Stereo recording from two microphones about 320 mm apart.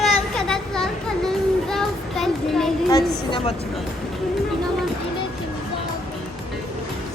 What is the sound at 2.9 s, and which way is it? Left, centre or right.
Speech, centre.